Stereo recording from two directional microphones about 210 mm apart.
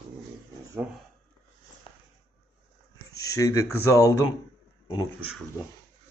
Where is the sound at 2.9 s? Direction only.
15° left (ahead or behind).